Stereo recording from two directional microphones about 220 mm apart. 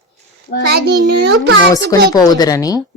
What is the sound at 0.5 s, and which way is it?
Child singing, 40° left (ahead or behind).